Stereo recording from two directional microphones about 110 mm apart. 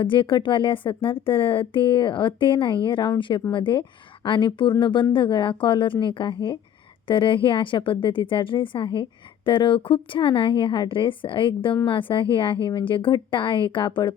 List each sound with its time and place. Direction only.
0.0 s a woman's voice: 50° left (ahead or behind)